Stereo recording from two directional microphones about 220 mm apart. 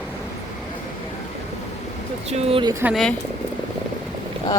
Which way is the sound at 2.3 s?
25° right (ahead or behind).